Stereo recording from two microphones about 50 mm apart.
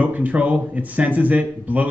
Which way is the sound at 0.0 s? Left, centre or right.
Right.